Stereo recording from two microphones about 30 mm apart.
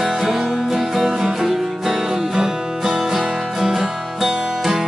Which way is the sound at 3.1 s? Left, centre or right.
Centre.